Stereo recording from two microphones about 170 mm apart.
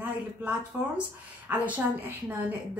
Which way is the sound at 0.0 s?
10° right (ahead or behind).